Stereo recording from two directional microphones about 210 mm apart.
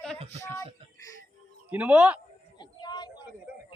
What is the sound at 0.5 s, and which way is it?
Music, 15° left (ahead or behind).